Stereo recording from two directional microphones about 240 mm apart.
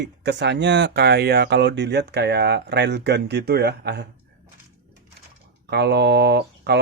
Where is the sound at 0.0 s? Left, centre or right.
Right.